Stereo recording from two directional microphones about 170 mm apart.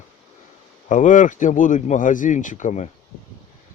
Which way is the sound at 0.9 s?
50° left (ahead or behind).